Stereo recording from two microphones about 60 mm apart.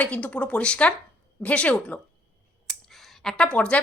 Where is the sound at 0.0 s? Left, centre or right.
Left.